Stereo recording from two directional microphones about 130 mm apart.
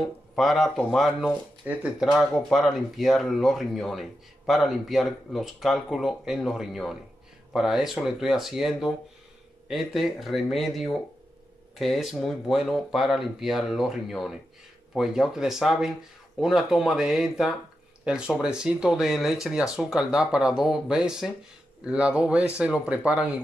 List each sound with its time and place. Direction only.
0.4 s speech: centre (ahead or behind)